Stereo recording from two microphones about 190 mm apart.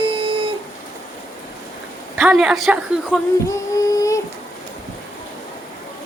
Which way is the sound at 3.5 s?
15° left (ahead or behind).